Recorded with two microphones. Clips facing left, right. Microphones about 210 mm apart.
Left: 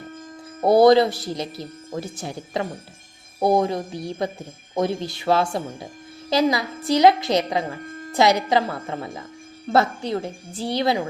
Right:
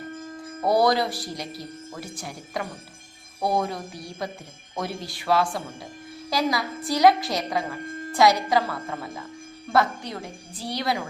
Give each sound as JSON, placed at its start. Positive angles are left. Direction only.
{"t": 0.6, "sound": "speech", "side_deg": 25}